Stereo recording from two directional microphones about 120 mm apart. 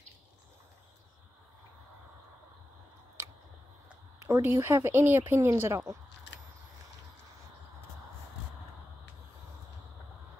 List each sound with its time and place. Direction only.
4.3 s speech: 20° right (ahead or behind)